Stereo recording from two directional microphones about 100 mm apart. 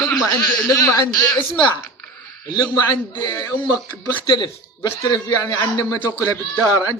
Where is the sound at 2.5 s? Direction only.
40° left (ahead or behind).